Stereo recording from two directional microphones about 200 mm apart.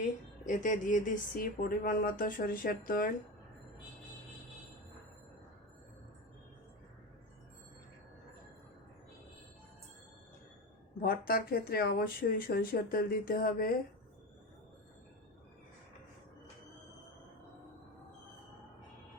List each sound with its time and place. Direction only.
0.4 s speech: 40° left (ahead or behind)
11.0 s speech: 45° left (ahead or behind)